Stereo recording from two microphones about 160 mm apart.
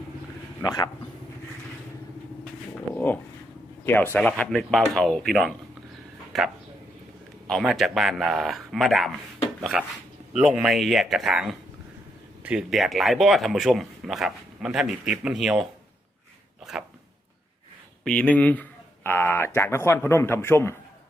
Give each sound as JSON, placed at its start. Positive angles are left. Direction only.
{"t": 0.6, "sound": "speech", "side_deg": 25}
{"t": 2.7, "sound": "dog", "side_deg": 10}
{"t": 3.8, "sound": "a man's voice", "side_deg": 15}
{"t": 7.4, "sound": "speech", "side_deg": 0}
{"t": 18.0, "sound": "a man's voice", "side_deg": 10}